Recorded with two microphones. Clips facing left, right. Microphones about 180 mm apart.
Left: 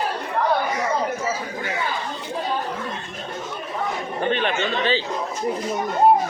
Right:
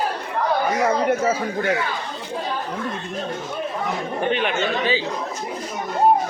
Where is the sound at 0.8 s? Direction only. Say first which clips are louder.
Right 5 dB; 60° right (ahead or behind).